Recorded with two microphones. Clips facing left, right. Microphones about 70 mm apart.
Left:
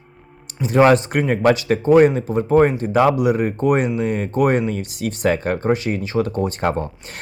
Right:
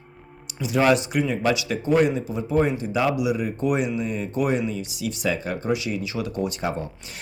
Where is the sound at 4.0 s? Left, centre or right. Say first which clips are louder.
Left 7 dB; left.